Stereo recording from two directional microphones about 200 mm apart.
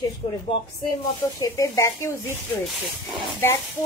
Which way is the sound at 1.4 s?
15° left (ahead or behind).